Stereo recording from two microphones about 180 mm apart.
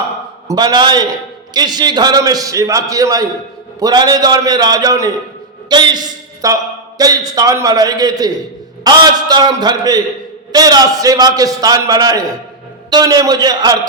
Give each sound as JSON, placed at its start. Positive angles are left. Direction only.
{"t": 0.4, "sound": "a man's voice", "side_deg": -25}